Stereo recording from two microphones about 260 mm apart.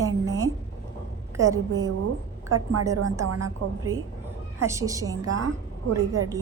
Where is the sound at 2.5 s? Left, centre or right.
Right.